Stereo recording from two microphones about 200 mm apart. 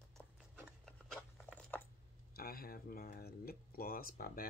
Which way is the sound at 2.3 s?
50° left (ahead or behind).